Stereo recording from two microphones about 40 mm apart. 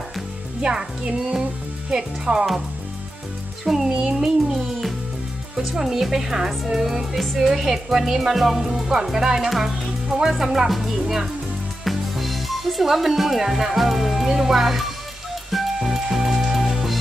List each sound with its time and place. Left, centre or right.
0.6 s speech: right
3.6 s speech: centre
15.5 s music: centre